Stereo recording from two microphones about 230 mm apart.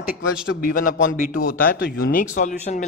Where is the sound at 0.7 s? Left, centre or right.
Left.